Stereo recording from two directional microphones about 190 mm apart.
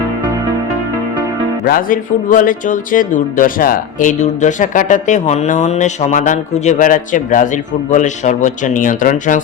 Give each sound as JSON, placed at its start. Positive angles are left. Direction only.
{"t": 1.6, "sound": "a man's voice", "side_deg": 50}